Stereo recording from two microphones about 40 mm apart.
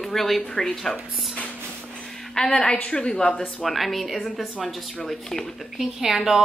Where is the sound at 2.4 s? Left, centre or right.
Left.